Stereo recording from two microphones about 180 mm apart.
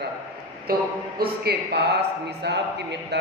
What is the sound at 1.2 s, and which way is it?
A man's voice, 65° right (ahead or behind).